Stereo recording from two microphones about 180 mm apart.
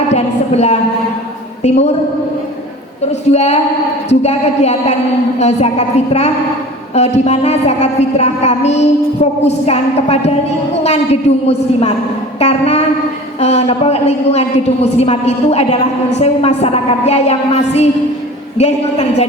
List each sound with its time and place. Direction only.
0.1 s a sound: 40° left (ahead or behind)
1.6 s a woman's voice: 40° left (ahead or behind)
3.1 s a woman's voice: 35° left (ahead or behind)